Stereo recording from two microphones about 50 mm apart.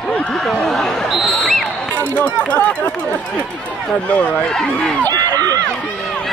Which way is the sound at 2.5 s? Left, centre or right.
Left.